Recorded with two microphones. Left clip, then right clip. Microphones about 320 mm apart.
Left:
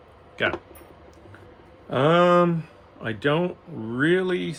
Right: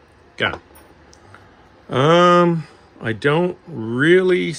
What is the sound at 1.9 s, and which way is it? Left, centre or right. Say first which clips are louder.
Speech: right 5 dB; right.